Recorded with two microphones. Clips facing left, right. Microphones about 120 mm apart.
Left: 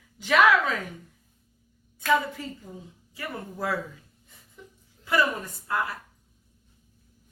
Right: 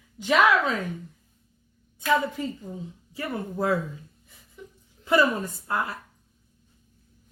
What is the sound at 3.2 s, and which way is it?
Speech, 25° right (ahead or behind).